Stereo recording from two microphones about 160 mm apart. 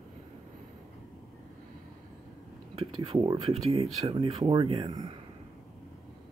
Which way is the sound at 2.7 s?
30° right (ahead or behind).